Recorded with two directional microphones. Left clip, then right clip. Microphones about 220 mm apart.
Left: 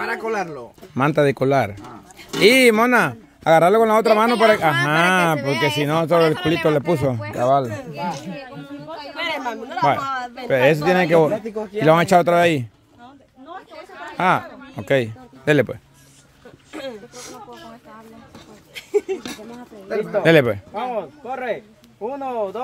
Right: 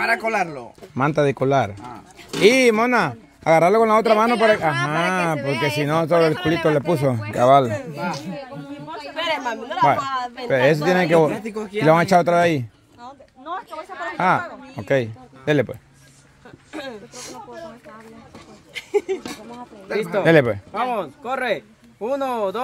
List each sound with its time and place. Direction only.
0.0 s speech: 35° right (ahead or behind)
0.9 s speech: 15° left (ahead or behind)
5.4 s speech: 30° left (ahead or behind)
5.9 s speech: 10° left (ahead or behind)
7.3 s speech: 10° right (ahead or behind)
9.1 s a woman's voice: centre (ahead or behind)
11.4 s speech: 35° right (ahead or behind)
11.8 s speech: 10° left (ahead or behind)
14.1 s speech: 10° left (ahead or behind)
16.7 s speech: 5° right (ahead or behind)
18.7 s a sound: 5° right (ahead or behind)
19.9 s speech: 35° right (ahead or behind)
20.2 s speech: 10° left (ahead or behind)
20.9 s speech: 50° right (ahead or behind)